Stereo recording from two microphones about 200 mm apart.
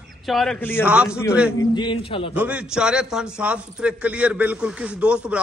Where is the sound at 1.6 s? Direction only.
25° left (ahead or behind).